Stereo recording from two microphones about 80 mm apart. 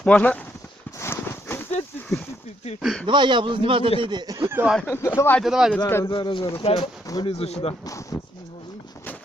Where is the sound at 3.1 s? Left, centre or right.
Right.